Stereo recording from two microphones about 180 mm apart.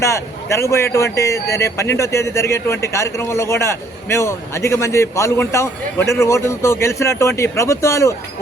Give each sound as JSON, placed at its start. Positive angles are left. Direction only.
{"t": 0.0, "sound": "a man's voice", "side_deg": 15}